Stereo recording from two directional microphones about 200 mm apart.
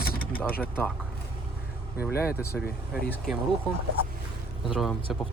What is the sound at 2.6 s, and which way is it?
Speech, 50° left (ahead or behind).